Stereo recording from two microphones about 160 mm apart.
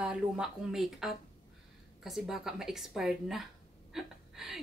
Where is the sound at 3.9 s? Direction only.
5° right (ahead or behind).